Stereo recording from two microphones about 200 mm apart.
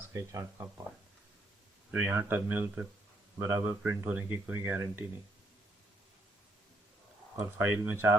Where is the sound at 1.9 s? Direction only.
10° right (ahead or behind).